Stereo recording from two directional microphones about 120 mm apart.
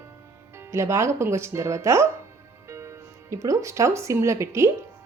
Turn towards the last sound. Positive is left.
turn(degrees=-25)  # may be behind; listen again after turning